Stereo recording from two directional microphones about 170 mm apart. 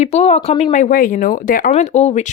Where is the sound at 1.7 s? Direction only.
40° left (ahead or behind).